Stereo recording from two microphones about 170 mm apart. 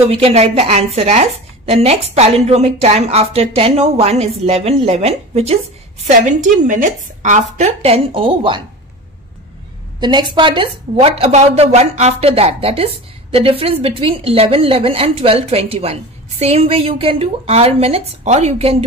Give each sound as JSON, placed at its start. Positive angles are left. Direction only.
{"t": 0.1, "sound": "a woman's voice", "side_deg": -35}
{"t": 9.9, "sound": "a woman's voice", "side_deg": -25}